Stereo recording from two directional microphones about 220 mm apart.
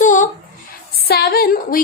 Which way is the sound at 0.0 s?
35° left (ahead or behind).